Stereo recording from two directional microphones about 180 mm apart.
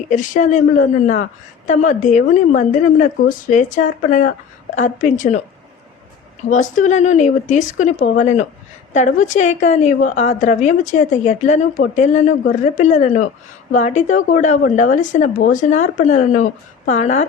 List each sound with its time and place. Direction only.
0.1 s a woman's voice: 45° left (ahead or behind)
6.5 s a woman's voice: 45° left (ahead or behind)